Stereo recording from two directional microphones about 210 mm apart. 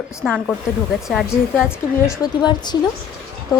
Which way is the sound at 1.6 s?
15° left (ahead or behind).